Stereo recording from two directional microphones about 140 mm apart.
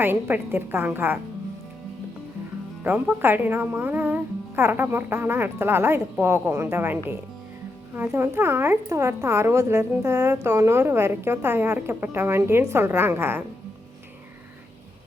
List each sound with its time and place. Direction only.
0.0 s a woman's voice: 15° right (ahead or behind)
2.8 s a woman's voice: 15° right (ahead or behind)